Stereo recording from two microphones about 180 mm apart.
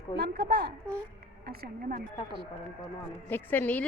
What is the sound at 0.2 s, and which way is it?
Speech, 60° right (ahead or behind).